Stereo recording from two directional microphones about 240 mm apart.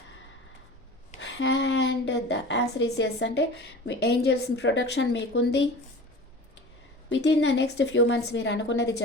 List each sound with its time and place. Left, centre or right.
1.2 s a woman's voice: left
7.1 s a woman's voice: left